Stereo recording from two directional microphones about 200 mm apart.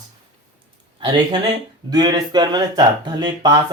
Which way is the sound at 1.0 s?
25° right (ahead or behind).